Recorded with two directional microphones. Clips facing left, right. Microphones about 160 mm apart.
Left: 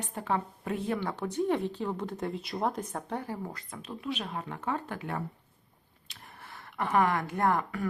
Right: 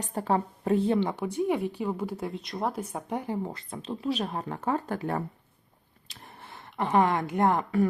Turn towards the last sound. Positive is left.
turn(degrees=-20)  # may be behind; listen again after turning